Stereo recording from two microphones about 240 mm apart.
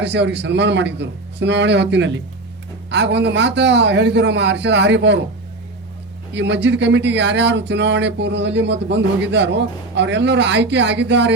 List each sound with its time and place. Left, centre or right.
0.0 s speech: right
6.3 s speech: right